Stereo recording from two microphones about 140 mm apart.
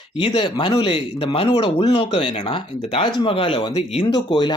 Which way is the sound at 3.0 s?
30° left (ahead or behind).